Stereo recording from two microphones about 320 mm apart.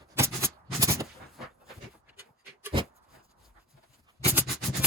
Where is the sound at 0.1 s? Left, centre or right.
Centre.